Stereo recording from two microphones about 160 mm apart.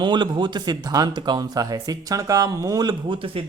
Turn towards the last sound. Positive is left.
turn(degrees=-30)  # may be behind; listen again after turning